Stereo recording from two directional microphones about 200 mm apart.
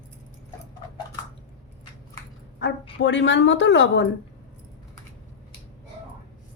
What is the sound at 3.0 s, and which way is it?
A woman's voice, 65° left (ahead or behind).